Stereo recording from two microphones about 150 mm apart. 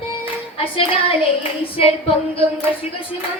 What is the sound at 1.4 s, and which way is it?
Speech, 40° left (ahead or behind).